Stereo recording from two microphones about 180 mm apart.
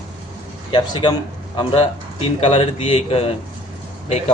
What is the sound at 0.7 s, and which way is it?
Speech, 25° left (ahead or behind).